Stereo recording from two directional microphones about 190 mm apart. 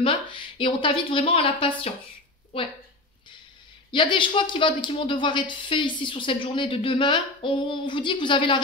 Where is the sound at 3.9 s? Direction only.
25° left (ahead or behind).